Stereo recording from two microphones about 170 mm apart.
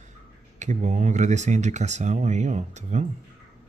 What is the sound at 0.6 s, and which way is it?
Speech, 45° right (ahead or behind).